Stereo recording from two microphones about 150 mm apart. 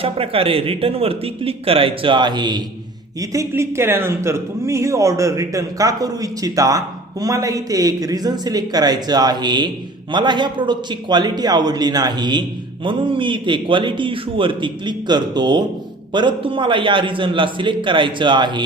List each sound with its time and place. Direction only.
0.0 s a man's voice: 40° right (ahead or behind)